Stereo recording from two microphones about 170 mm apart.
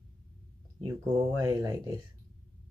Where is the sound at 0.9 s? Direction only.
15° right (ahead or behind).